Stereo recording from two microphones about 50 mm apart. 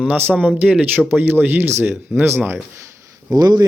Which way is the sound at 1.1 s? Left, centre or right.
Right.